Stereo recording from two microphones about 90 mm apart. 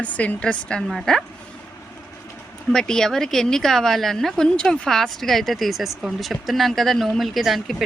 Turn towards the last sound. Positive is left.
turn(degrees=0)  # may be behind; listen again after turning